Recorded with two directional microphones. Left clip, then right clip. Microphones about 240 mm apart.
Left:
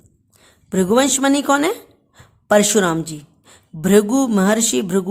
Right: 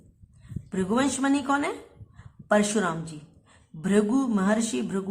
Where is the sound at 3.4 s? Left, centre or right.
Left.